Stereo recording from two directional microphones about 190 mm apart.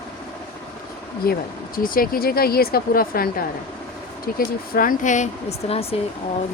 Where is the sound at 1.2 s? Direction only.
55° left (ahead or behind); by 5.9 s 30° left (ahead or behind).